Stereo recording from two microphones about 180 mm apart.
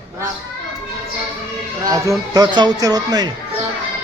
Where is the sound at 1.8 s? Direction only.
20° right (ahead or behind).